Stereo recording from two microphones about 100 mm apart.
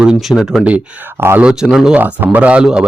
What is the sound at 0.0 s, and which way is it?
Speech, 5° right (ahead or behind).